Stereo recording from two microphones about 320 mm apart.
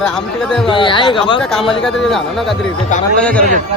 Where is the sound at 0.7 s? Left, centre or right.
Centre.